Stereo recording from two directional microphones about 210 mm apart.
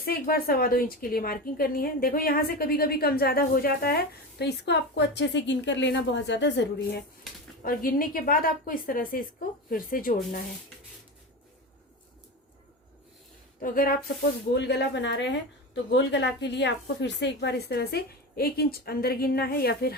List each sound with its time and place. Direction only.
0.0 s a woman's voice: 45° left (ahead or behind)
7.6 s a woman's voice: 45° left (ahead or behind)
13.6 s a woman's voice: 45° left (ahead or behind)
14.6 s a woman's voice: 55° left (ahead or behind)